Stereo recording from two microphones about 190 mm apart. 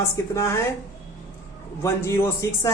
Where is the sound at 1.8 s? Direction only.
15° left (ahead or behind).